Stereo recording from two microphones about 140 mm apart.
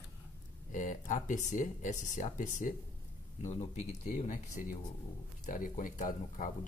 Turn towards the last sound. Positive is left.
turn(degrees=70)  # may be behind; listen again after turning